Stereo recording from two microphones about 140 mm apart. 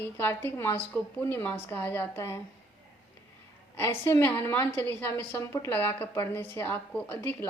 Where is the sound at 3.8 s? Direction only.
20° left (ahead or behind).